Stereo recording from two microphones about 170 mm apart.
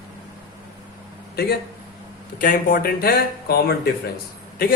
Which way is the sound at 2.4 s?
55° left (ahead or behind).